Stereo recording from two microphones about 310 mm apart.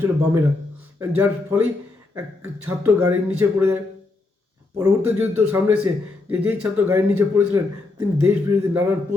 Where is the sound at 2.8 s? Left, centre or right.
Centre.